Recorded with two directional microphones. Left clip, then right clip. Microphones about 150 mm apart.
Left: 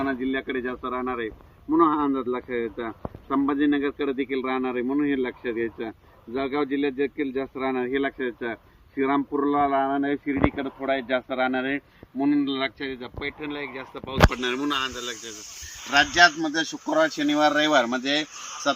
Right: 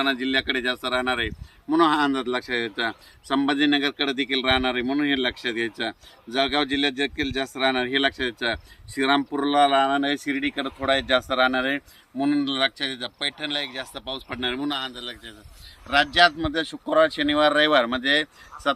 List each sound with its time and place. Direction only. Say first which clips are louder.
0.0 s speech: right 4 dB; 20° right (ahead or behind)
12.2 s speech: right 2 dB; 45° right (ahead or behind); by 14.5 s 75° right (ahead or behind)
16.1 s speech: even; 50° right (ahead or behind)
16.9 s speech: right 3 dB; 25° right (ahead or behind); by 18.7 s centre (ahead or behind)